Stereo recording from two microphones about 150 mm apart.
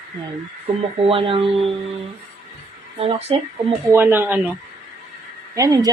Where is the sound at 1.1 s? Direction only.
35° right (ahead or behind).